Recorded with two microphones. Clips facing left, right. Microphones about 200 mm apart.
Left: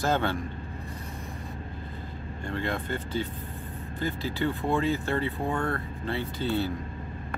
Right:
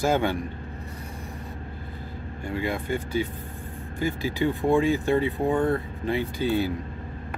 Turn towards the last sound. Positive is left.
turn(degrees=-10)  # may be behind; listen again after turning